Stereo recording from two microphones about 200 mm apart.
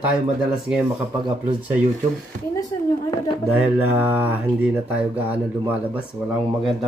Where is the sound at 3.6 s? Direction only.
10° right (ahead or behind).